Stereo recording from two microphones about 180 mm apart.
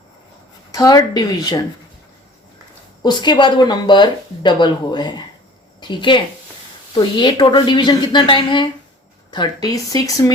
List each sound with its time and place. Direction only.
0.7 s speech: 20° left (ahead or behind)
3.0 s speech: 25° left (ahead or behind)